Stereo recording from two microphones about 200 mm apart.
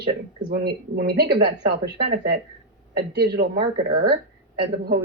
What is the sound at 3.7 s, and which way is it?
Speech, 20° right (ahead or behind).